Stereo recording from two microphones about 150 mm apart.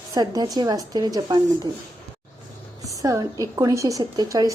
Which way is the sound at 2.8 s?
20° right (ahead or behind).